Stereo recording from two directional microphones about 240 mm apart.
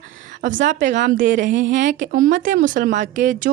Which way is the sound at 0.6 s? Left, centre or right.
Right.